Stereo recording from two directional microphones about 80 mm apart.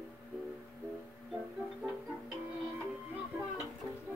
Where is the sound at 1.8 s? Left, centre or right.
Right.